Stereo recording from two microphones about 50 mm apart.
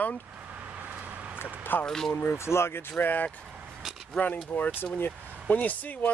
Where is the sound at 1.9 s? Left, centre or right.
Centre.